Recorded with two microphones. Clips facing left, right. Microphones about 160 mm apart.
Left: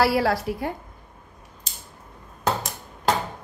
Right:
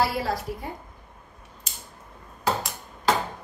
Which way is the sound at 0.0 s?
80° left.